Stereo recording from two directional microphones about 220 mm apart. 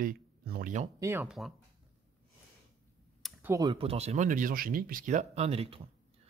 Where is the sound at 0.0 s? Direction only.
40° right (ahead or behind).